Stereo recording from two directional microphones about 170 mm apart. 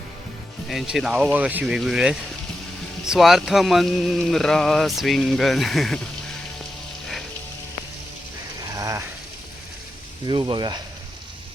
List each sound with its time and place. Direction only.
0.7 s speech: centre (ahead or behind)
8.7 s a sound: 20° right (ahead or behind)
10.2 s speech: 25° right (ahead or behind)